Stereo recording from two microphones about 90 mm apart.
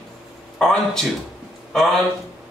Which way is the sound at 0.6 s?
5° left (ahead or behind).